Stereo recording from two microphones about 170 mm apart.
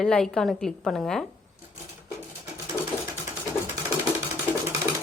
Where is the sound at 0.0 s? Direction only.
5° left (ahead or behind).